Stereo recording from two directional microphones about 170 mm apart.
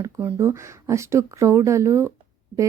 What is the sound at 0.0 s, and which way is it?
Speech, 15° right (ahead or behind).